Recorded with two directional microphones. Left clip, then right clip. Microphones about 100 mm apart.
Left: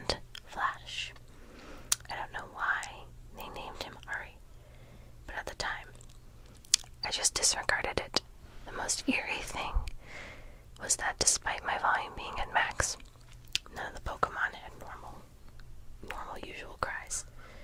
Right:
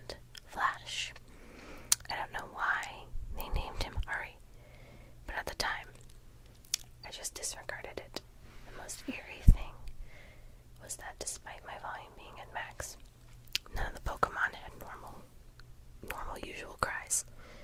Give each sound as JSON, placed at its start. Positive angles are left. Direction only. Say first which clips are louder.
{"t": 0.6, "sound": "whispering", "louder": "right 1 dB", "side_deg": -30}
{"t": 7.0, "sound": "whispering", "louder": "left 12 dB", "side_deg": 30}
{"t": 8.7, "sound": "speech", "louder": "left 11 dB", "side_deg": 30}
{"t": 13.5, "sound": "whispering", "louder": "left 2 dB", "side_deg": -20}